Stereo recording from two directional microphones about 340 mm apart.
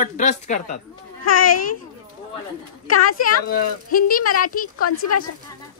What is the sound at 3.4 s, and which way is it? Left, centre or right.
Speech, left.